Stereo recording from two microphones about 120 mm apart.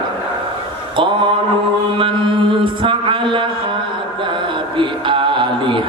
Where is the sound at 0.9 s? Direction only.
45° right (ahead or behind).